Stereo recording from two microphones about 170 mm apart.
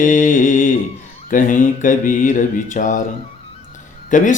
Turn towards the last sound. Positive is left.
turn(degrees=50)  # may be behind; listen again after turning